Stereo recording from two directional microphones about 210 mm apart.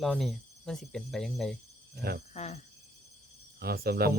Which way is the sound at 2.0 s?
50° right (ahead or behind).